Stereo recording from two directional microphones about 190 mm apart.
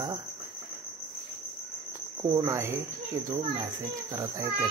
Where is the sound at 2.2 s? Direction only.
20° right (ahead or behind).